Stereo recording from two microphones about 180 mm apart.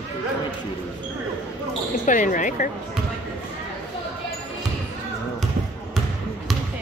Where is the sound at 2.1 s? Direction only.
45° left (ahead or behind).